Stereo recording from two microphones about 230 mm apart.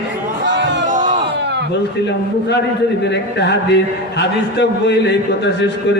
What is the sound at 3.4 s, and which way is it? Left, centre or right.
A man's voice, left.